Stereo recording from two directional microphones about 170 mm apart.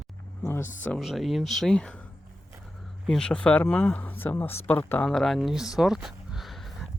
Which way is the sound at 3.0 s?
5° left (ahead or behind).